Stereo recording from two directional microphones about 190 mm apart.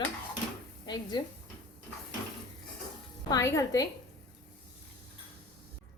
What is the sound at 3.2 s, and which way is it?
Speech, 15° left (ahead or behind).